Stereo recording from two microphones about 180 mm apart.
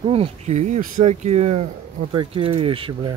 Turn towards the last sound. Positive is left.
turn(degrees=-30)  # may be behind; listen again after turning